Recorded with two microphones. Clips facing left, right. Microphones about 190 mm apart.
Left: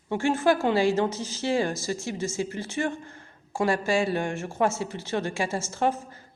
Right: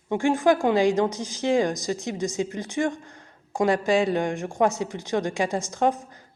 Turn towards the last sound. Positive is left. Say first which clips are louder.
# right 3 dB
turn(degrees=-15)  # may be behind; listen again after turning